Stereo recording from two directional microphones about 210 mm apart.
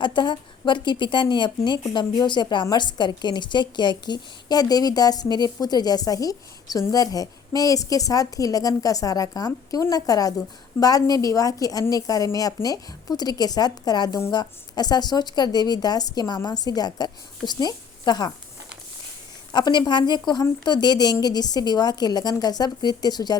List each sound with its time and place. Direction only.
0.0 s a woman's voice: 20° left (ahead or behind)
19.5 s a woman's voice: 20° left (ahead or behind)